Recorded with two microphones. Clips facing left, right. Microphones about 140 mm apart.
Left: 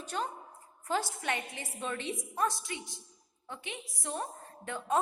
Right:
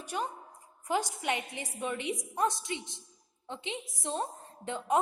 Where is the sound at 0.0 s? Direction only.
10° right (ahead or behind).